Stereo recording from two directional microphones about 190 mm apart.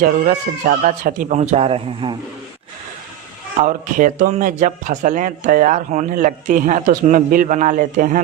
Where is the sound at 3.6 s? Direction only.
45° right (ahead or behind).